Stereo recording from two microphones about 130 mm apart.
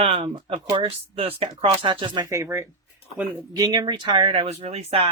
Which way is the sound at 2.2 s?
25° right (ahead or behind).